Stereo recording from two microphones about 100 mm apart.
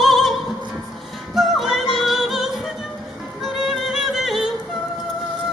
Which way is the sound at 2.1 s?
5° right (ahead or behind).